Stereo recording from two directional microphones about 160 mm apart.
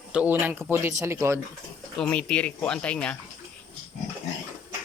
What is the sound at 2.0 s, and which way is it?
Speech, 5° left (ahead or behind).